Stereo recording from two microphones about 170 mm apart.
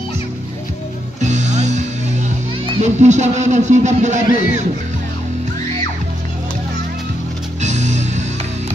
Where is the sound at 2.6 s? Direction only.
40° right (ahead or behind).